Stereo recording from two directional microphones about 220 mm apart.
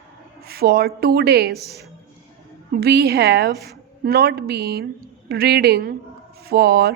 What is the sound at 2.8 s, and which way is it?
A woman's voice, 45° right (ahead or behind).